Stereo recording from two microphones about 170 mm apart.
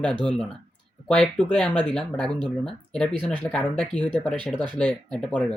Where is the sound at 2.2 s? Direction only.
25° right (ahead or behind).